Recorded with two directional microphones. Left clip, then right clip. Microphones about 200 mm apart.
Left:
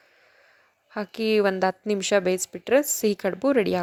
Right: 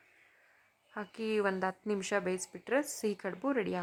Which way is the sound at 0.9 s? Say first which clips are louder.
Left 11 dB; 25° left (ahead or behind).